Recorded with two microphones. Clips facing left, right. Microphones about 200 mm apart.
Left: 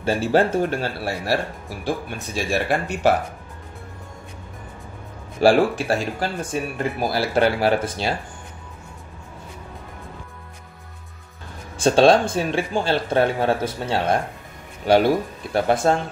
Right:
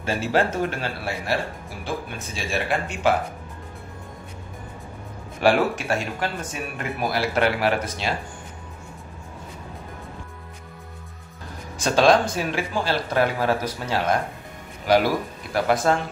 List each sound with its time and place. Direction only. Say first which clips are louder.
0.0 s speech: left 4 dB; 35° left (ahead or behind)
5.4 s speech: left 4 dB; 35° left (ahead or behind)
11.8 s speech: left 3 dB; 30° left (ahead or behind)